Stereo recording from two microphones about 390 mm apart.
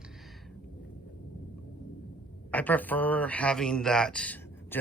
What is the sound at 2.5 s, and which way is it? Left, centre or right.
A man's voice, centre.